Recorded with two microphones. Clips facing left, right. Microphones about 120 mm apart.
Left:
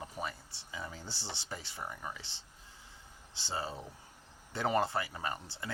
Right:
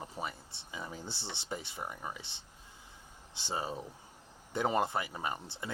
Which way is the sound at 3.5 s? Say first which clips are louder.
Right 2 dB; 20° right (ahead or behind).